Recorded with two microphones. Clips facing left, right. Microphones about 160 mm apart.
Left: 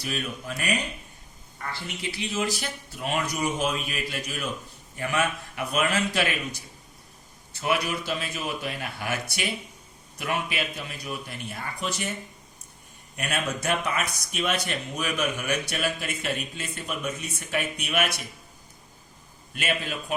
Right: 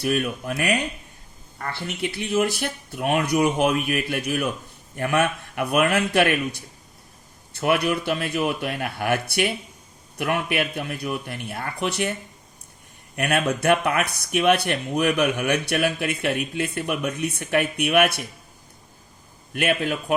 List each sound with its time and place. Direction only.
0.0 s speech: 55° right (ahead or behind)
13.1 s speech: 60° right (ahead or behind)
19.5 s speech: 60° right (ahead or behind)